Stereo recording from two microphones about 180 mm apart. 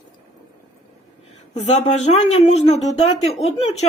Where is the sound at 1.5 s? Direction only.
40° left (ahead or behind).